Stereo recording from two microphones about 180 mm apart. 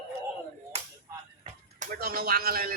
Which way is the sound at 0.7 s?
35° right (ahead or behind).